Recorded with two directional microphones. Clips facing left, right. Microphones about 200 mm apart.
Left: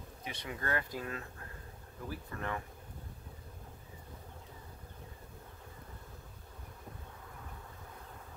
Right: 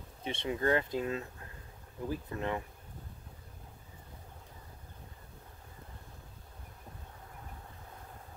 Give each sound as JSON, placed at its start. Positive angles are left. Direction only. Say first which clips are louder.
{"t": 0.2, "sound": "speech", "louder": "right 9 dB", "side_deg": -25}